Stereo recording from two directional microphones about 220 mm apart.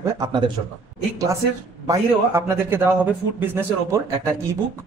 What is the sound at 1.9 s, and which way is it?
A man's voice, 10° right (ahead or behind).